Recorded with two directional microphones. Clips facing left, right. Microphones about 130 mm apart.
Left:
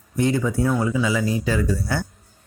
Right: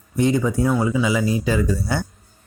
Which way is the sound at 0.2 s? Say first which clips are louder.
Right 2 dB; 20° right (ahead or behind).